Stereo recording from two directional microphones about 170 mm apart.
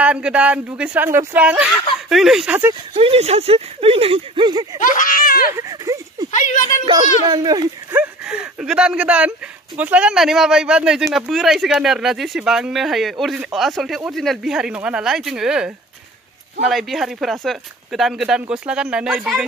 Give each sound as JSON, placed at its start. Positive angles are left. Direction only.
{"t": 0.0, "sound": "speech", "side_deg": -5}
{"t": 2.9, "sound": "speech", "side_deg": -35}
{"t": 4.9, "sound": "speech", "side_deg": 55}
{"t": 5.6, "sound": "a sound", "side_deg": -20}
{"t": 6.3, "sound": "a woman's voice", "side_deg": 50}
{"t": 7.2, "sound": "a child's voice", "side_deg": -20}
{"t": 8.0, "sound": "speech", "side_deg": -5}